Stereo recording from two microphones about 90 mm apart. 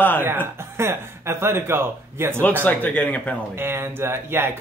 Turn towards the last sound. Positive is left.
turn(degrees=-25)  # may be behind; listen again after turning